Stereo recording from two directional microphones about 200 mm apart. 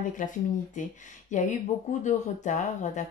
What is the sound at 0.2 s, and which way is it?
A woman's voice, 40° left (ahead or behind).